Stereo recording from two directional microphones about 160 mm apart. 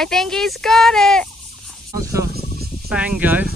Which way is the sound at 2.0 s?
20° right (ahead or behind).